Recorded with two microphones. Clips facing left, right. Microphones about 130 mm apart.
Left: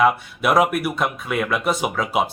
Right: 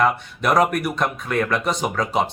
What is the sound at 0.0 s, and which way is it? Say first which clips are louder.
Speech: left 2 dB; 5° left (ahead or behind).